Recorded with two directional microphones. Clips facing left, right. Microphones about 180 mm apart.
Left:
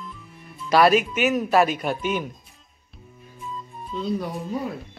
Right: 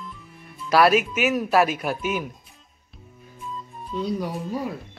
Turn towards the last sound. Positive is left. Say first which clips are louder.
# even
turn(degrees=-10)  # may be behind; listen again after turning